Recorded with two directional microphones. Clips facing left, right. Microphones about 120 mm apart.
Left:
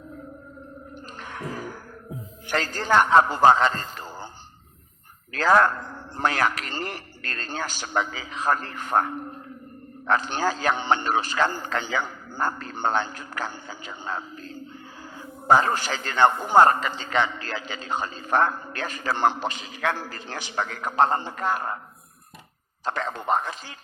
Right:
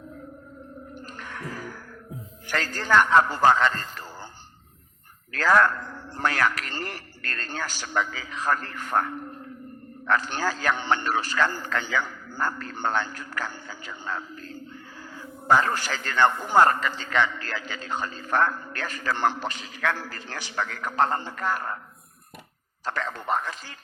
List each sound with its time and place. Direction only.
2.6 s a man's voice: 15° left (ahead or behind)
5.3 s a man's voice: 20° left (ahead or behind)
10.1 s a man's voice: 20° left (ahead or behind)
15.6 s a man's voice: 20° left (ahead or behind)
22.8 s a man's voice: 20° left (ahead or behind)